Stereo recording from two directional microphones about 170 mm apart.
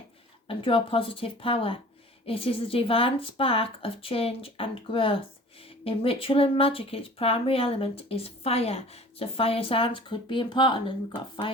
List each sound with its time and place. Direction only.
0.4 s speech: 30° left (ahead or behind)